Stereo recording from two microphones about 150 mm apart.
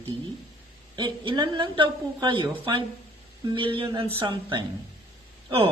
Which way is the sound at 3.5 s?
35° right (ahead or behind).